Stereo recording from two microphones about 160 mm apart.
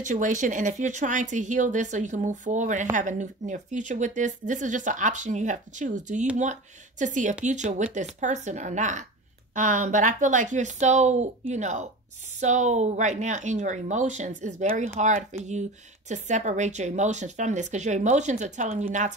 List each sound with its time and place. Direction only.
0.0 s speech: 50° right (ahead or behind)